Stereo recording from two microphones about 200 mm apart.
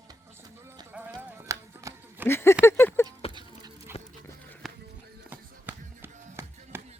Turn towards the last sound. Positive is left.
turn(degrees=-10)  # may be behind; listen again after turning